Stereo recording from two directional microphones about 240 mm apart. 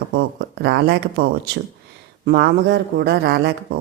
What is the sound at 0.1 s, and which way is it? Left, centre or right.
Speech, right.